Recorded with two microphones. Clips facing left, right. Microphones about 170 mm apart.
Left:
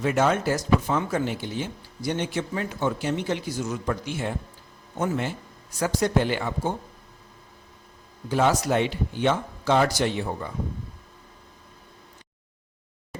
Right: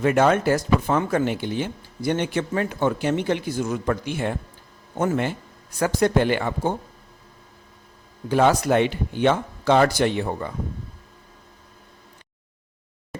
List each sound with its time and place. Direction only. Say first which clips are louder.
0.0 s speech: right 4 dB; 60° right (ahead or behind)
8.3 s speech: right 4 dB; 60° right (ahead or behind)